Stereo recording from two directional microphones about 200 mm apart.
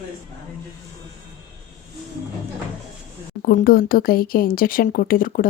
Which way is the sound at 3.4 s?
45° left (ahead or behind).